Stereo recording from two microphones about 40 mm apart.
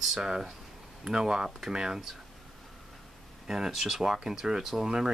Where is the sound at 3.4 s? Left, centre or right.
Centre.